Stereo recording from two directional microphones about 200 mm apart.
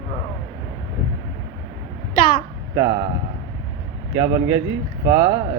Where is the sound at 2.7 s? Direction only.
20° right (ahead or behind).